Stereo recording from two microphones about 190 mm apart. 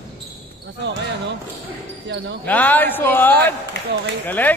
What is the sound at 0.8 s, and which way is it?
Basketball bounce, 65° right (ahead or behind).